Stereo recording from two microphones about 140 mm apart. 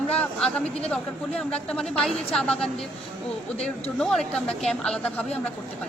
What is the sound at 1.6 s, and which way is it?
A woman's voice, 5° left (ahead or behind).